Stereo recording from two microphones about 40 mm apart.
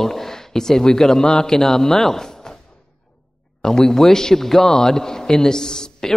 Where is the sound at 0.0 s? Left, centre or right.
Centre.